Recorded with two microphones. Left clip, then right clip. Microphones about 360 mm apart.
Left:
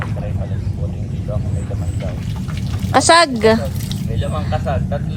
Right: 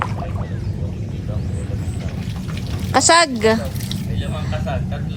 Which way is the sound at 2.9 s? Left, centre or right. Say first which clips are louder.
Left 2 dB; centre.